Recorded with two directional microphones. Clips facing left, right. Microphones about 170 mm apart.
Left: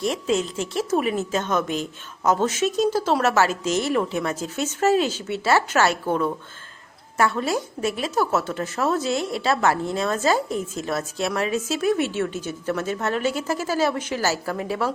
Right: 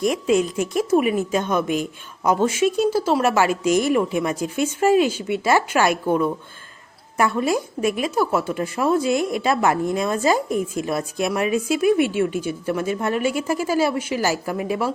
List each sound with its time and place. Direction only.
0.0 s a woman's voice: 10° right (ahead or behind)